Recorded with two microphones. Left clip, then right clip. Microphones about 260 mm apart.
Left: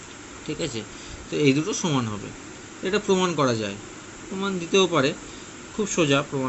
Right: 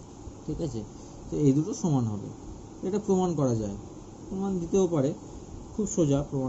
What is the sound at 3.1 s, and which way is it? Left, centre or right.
A man's voice, left.